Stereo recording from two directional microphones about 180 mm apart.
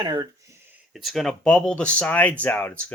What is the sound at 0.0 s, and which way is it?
Speech, 20° right (ahead or behind).